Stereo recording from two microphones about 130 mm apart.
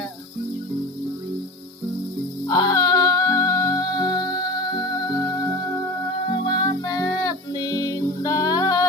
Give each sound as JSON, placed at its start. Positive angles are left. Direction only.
{"t": 2.5, "sound": "music", "side_deg": 30}